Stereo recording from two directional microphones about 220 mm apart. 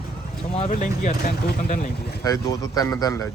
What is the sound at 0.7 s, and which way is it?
Speech, 35° left (ahead or behind).